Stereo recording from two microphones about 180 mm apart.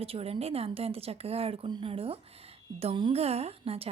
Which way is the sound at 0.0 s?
35° right (ahead or behind).